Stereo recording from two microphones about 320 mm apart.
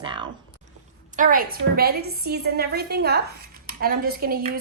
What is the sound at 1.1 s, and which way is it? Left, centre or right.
A woman's voice, right.